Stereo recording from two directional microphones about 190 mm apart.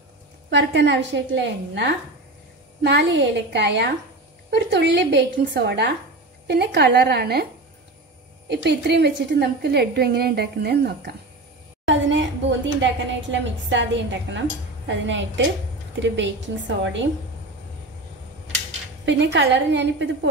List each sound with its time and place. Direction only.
0.5 s a woman's voice: 70° right (ahead or behind)
8.5 s a woman's voice: 65° right (ahead or behind)
11.8 s a woman's voice: 70° right (ahead or behind)
19.0 s a woman's voice: 70° right (ahead or behind)